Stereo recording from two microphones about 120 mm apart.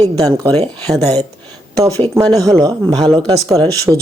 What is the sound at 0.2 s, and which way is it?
A woman's voice, 30° right (ahead or behind).